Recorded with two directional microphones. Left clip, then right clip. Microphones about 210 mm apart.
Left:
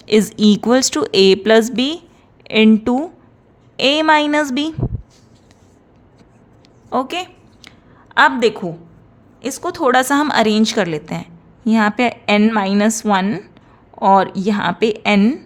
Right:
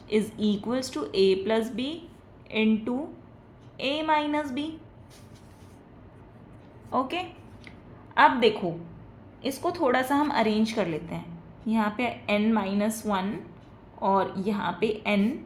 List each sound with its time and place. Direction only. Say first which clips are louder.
0.0 s speech: left 12 dB; 55° left (ahead or behind)
6.9 s a sound: left 8 dB; 40° left (ahead or behind)
8.1 s a woman's voice: left 7 dB; 40° left (ahead or behind)